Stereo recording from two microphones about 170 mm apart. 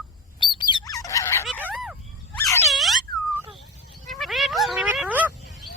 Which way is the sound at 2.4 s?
15° left (ahead or behind).